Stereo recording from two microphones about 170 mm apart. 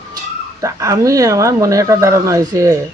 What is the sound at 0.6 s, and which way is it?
Speech, 20° right (ahead or behind).